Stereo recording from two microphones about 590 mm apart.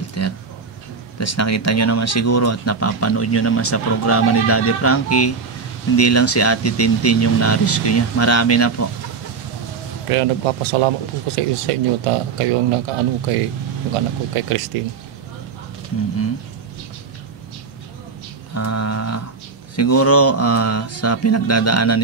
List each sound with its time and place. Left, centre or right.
0.2 s speech: left
10.0 s a man's voice: right
18.5 s a sound: left
19.7 s speech: left